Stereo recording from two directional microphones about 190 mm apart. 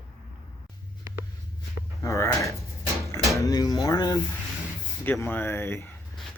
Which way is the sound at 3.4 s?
20° left (ahead or behind).